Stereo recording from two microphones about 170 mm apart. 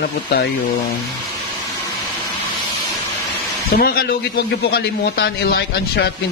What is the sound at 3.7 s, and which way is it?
Speech, 65° left (ahead or behind).